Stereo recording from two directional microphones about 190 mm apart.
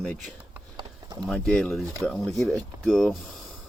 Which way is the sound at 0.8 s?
20° right (ahead or behind).